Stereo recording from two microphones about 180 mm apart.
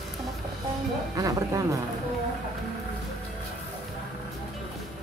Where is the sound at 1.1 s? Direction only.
20° right (ahead or behind).